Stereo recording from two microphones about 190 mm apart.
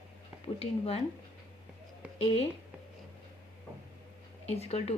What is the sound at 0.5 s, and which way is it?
Speech, 30° left (ahead or behind).